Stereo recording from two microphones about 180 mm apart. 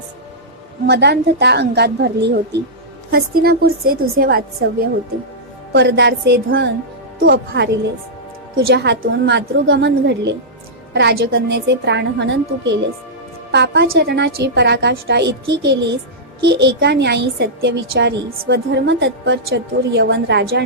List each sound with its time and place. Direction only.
0.9 s a woman's voice: 65° right (ahead or behind)
5.7 s a woman's voice: 70° right (ahead or behind)